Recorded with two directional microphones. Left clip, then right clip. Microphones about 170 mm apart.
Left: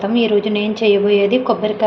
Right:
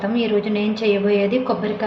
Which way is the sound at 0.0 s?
35° left (ahead or behind).